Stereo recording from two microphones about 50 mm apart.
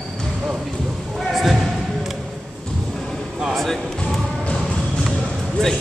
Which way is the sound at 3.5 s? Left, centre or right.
Centre.